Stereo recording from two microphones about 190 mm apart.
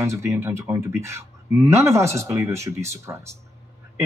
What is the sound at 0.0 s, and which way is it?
Speech, 15° right (ahead or behind).